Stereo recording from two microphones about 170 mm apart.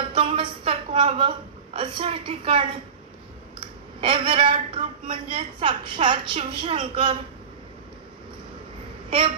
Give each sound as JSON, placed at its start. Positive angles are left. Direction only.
{"t": 0.1, "sound": "a sound", "side_deg": -30}
{"t": 1.8, "sound": "a woman's voice", "side_deg": -30}
{"t": 4.0, "sound": "a woman's voice", "side_deg": -30}